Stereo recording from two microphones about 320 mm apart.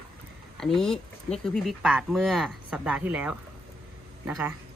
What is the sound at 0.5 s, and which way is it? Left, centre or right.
Speech, centre.